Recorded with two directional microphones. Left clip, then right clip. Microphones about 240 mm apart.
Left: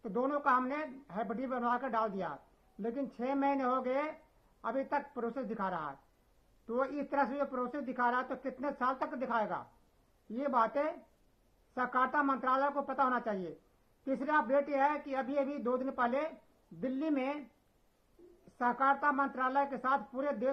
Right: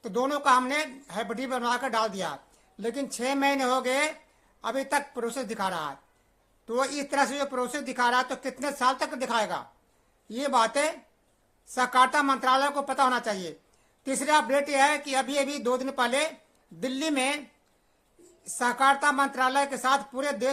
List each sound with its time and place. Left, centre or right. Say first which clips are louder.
0.0 s speech: right 7 dB; centre
18.6 s speech: right 7 dB; right